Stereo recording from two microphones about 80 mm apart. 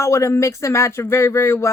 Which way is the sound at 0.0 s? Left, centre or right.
Left.